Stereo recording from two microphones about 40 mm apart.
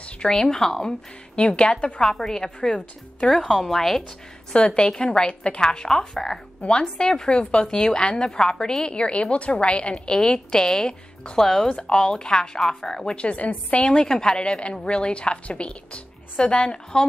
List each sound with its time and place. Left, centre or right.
0.3 s a woman's voice: centre
1.6 s a woman's voice: left
2.0 s a woman's voice: centre
4.5 s a woman's voice: left
11.4 s a woman's voice: centre
11.7 s a woman's voice: centre
12.5 s a woman's voice: centre
12.9 s a woman's voice: left
13.7 s a woman's voice: left